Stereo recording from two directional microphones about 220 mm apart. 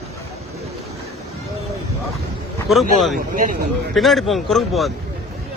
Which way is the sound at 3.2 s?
40° right (ahead or behind).